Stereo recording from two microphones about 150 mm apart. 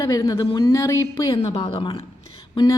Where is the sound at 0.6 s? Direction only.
20° left (ahead or behind).